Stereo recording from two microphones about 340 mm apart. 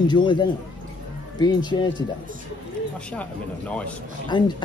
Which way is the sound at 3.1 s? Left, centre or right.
Centre.